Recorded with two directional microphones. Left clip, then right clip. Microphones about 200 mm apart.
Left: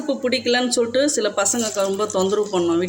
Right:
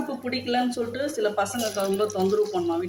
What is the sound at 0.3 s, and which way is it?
Speech, 50° left (ahead or behind).